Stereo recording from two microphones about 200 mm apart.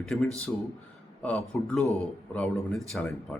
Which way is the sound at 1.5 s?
Centre (ahead or behind).